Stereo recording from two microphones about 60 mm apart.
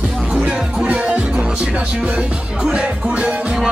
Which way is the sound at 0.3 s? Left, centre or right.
Centre.